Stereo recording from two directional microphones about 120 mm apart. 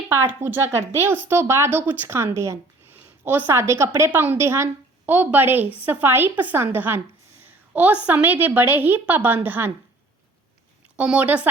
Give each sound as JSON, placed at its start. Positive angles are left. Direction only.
{"t": 0.1, "sound": "a woman's voice", "side_deg": -20}
{"t": 10.9, "sound": "a woman's voice", "side_deg": -10}